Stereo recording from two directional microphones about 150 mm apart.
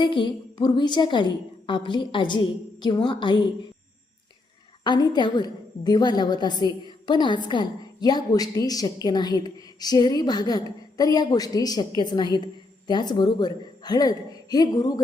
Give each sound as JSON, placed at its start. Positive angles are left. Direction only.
{"t": 0.0, "sound": "a woman's voice", "side_deg": 30}
{"t": 4.8, "sound": "a woman's voice", "side_deg": 30}